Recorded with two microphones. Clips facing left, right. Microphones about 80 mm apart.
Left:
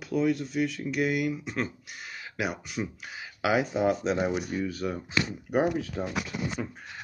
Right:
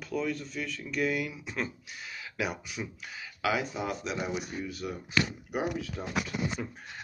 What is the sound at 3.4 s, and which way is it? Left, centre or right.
Speech, left.